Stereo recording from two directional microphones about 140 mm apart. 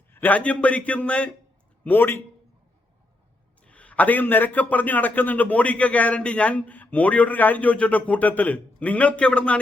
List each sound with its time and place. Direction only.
0.1 s a man's voice: 10° left (ahead or behind)
3.6 s a man's voice: 10° left (ahead or behind)